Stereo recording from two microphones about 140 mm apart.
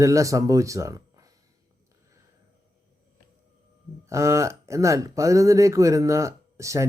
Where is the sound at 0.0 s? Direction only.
20° right (ahead or behind).